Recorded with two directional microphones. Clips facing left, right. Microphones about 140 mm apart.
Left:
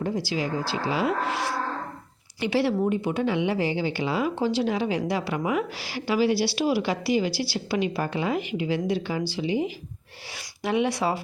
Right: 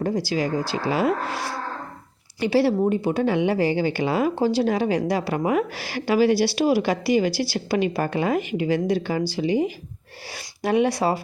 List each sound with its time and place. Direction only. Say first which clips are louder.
0.0 s a woman's voice: right 4 dB; 40° right (ahead or behind)